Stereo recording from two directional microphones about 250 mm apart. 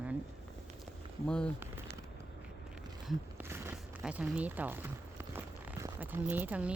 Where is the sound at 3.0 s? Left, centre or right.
Centre.